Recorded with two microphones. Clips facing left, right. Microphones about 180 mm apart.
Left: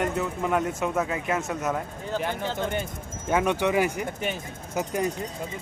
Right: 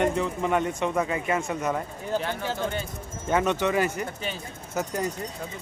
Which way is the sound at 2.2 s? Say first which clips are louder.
Left 1 dB; 20° left (ahead or behind).